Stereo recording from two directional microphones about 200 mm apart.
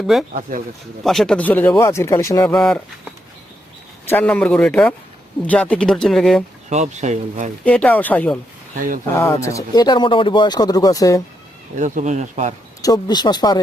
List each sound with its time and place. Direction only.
0.1 s speech: centre (ahead or behind)
0.5 s speech: 45° right (ahead or behind)
1.0 s speech: centre (ahead or behind)
2.5 s speech: 5° left (ahead or behind)
4.1 s speech: 5° left (ahead or behind)
6.7 s speech: 35° right (ahead or behind)
7.6 s speech: 5° left (ahead or behind)
8.7 s speech: 40° right (ahead or behind)
9.5 s speech: 15° left (ahead or behind)
11.8 s speech: 35° right (ahead or behind)
12.8 s speech: 20° left (ahead or behind)